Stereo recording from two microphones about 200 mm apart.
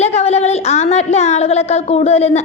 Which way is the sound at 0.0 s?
35° left (ahead or behind).